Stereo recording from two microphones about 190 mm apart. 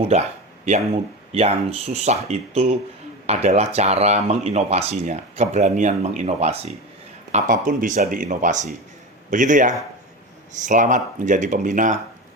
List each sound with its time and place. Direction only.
0.1 s speech: 35° right (ahead or behind)
7.3 s speech: 45° right (ahead or behind)